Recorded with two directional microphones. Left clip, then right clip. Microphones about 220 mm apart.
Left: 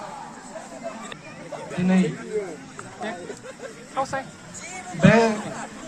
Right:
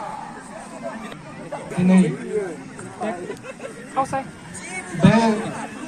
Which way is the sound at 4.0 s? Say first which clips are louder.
Right 4 dB; 45° right (ahead or behind).